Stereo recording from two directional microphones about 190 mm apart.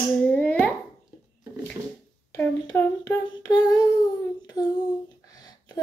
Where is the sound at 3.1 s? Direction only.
20° left (ahead or behind).